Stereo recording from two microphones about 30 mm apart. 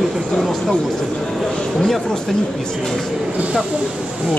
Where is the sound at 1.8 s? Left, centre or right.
Centre.